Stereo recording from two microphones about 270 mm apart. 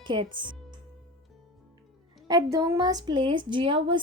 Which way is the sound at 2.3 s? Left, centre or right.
Centre.